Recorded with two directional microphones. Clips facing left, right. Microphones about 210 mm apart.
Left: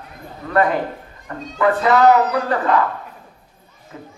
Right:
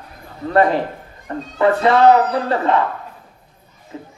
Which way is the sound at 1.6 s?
30° right (ahead or behind).